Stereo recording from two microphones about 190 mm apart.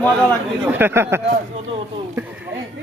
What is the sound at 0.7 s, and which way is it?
Speech, 10° right (ahead or behind).